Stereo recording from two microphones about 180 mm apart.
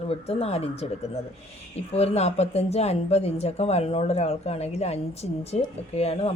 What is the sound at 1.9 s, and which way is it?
Speech, 35° left (ahead or behind).